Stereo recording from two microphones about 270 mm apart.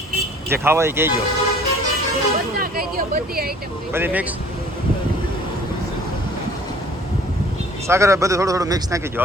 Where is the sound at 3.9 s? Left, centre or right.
Centre.